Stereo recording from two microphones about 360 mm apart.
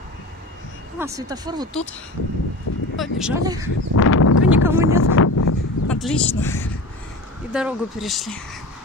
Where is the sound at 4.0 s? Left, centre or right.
Left.